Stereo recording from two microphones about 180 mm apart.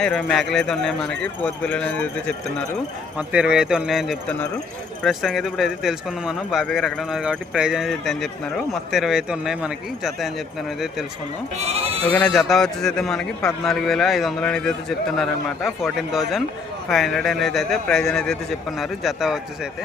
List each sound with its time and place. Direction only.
0.0 s speech: 5° left (ahead or behind)
3.2 s speech: 5° right (ahead or behind)
11.5 s speech: 35° right (ahead or behind)
12.1 s speech: 5° left (ahead or behind)